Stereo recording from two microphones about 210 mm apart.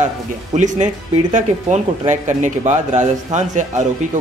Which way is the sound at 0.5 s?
35° right (ahead or behind).